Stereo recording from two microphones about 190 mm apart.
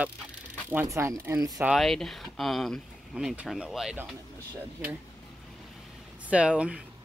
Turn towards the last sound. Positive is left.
turn(degrees=-5)  # may be behind; listen again after turning